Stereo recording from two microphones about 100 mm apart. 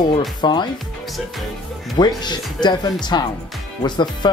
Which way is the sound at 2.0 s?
45° left (ahead or behind).